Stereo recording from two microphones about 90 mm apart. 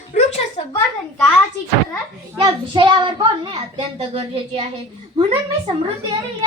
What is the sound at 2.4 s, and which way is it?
A child's voice, 60° right (ahead or behind).